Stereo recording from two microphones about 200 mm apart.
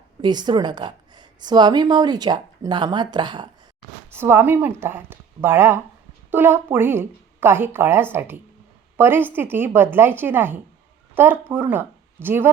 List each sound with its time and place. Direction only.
0.2 s a woman's voice: 20° right (ahead or behind)
4.1 s a woman's voice: 10° right (ahead or behind)